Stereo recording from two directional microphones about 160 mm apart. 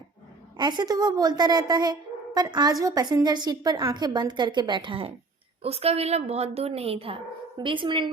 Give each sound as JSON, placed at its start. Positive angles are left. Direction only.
{"t": 0.5, "sound": "a woman's voice", "side_deg": -30}